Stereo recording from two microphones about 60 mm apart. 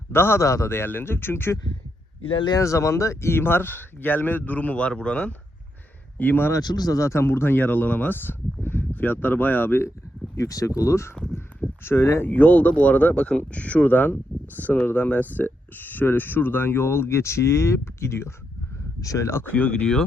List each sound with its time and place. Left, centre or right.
0.1 s speech: left
2.6 s speech: left; by 5.3 s centre
6.1 s speech: left
6.5 s speech: left
7.1 s speech: left
10.3 s speech: left
11.1 s speech: centre
11.3 s a sound: left
12.3 s speech: left
18.9 s speech: left
19.5 s speech: left